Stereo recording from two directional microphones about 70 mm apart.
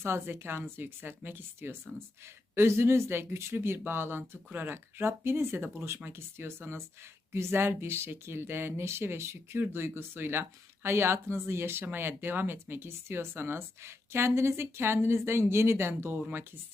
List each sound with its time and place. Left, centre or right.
0.0 s speech: right